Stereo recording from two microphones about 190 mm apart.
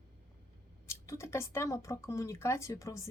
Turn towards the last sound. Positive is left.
turn(degrees=15)  # may be behind; listen again after turning